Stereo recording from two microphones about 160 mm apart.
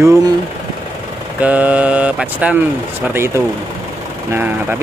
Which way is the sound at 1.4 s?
10° right (ahead or behind).